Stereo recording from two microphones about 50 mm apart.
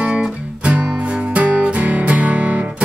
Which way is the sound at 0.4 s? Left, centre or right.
Right.